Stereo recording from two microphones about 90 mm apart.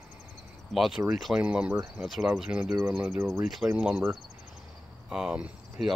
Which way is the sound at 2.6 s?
30° right (ahead or behind).